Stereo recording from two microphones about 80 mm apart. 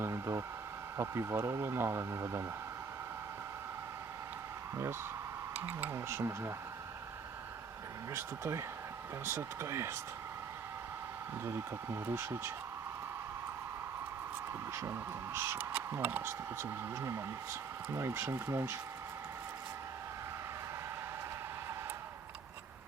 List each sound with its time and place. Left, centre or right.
0.0 s a sound: right
0.9 s speech: right
5.5 s speech: right
8.1 s speech: right
11.4 s speech: right
14.7 s speech: right